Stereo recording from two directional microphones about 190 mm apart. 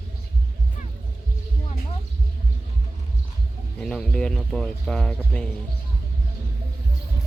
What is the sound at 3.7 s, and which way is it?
Speech, 5° left (ahead or behind).